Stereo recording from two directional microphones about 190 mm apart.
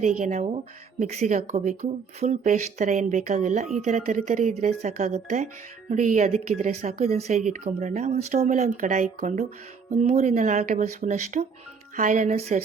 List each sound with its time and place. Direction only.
0.0 s speech: 35° right (ahead or behind)